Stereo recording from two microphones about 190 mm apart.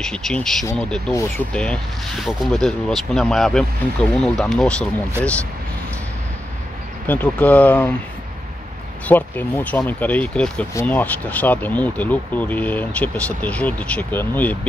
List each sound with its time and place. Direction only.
0.0 s speech: 5° left (ahead or behind)
7.1 s speech: 10° left (ahead or behind)
9.0 s speech: 10° left (ahead or behind)